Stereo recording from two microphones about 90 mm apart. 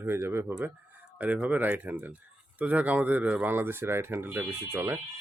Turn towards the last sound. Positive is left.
turn(degrees=-25)  # may be behind; listen again after turning